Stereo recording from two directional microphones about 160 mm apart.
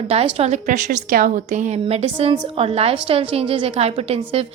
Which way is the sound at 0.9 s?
60° right (ahead or behind).